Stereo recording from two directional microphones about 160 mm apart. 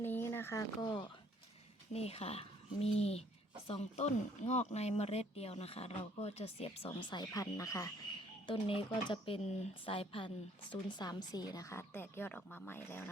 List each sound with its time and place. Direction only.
0.0 s speech: 15° left (ahead or behind)
1.9 s speech: 40° left (ahead or behind); by 7.9 s 20° left (ahead or behind)
8.4 s a woman's voice: 35° left (ahead or behind); by 13.1 s 15° left (ahead or behind)